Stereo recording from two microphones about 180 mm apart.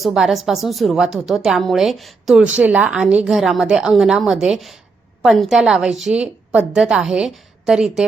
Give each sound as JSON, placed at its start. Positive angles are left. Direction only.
{"t": 0.0, "sound": "a woman's voice", "side_deg": 0}